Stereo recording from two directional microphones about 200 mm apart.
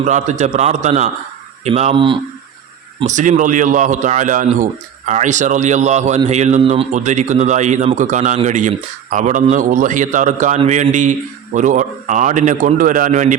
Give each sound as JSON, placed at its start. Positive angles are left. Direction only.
{"t": 0.0, "sound": "a man's voice", "side_deg": -35}
{"t": 3.0, "sound": "a man's voice", "side_deg": -40}